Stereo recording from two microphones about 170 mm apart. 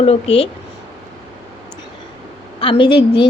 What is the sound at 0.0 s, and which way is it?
Speech, 35° left (ahead or behind).